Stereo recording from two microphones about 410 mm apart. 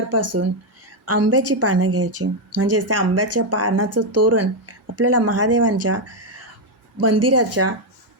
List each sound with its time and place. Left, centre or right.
0.1 s a woman's voice: right